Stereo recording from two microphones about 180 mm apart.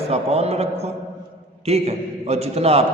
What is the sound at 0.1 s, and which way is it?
A man's voice, 35° right (ahead or behind).